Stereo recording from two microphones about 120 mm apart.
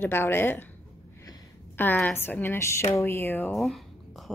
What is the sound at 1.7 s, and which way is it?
A woman's voice, 15° left (ahead or behind).